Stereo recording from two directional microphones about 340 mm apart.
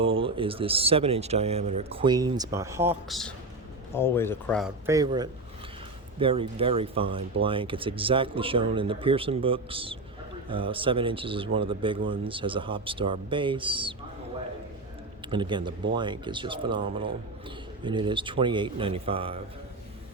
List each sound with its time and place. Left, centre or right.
0.0 s speech: centre
15.3 s speech: centre